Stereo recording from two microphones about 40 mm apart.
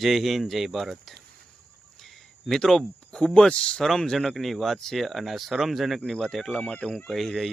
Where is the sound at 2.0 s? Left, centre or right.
Centre.